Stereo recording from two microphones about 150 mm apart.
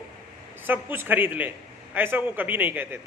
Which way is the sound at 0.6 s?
15° right (ahead or behind).